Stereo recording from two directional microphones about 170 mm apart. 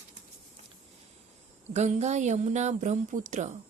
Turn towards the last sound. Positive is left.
turn(degrees=-45)  # may be behind; listen again after turning